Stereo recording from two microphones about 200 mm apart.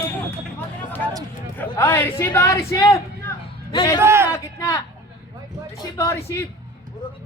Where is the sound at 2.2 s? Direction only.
10° left (ahead or behind).